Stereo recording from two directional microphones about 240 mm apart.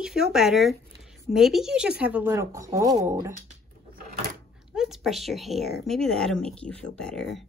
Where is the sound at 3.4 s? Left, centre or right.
Right.